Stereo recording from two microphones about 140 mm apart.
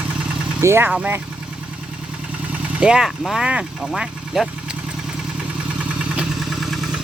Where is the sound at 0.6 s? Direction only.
20° right (ahead or behind).